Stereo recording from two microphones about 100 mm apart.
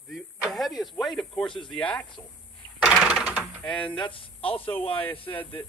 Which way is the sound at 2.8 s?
Centre (ahead or behind).